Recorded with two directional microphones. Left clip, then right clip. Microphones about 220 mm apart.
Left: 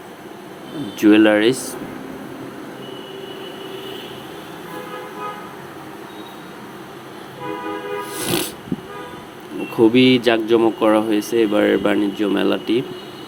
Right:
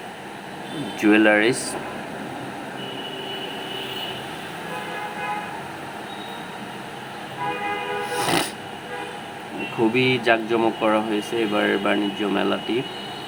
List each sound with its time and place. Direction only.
1.0 s speech: 15° left (ahead or behind)
8.1 s music: centre (ahead or behind)
9.9 s speech: 20° left (ahead or behind)